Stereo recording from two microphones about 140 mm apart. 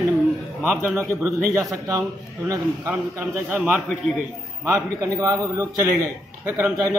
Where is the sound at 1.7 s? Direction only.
25° right (ahead or behind).